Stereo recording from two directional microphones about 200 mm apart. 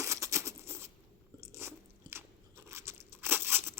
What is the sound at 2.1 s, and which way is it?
Crunch, 15° right (ahead or behind).